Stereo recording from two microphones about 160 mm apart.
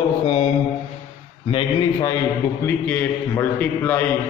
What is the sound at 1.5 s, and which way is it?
Speech, 30° left (ahead or behind).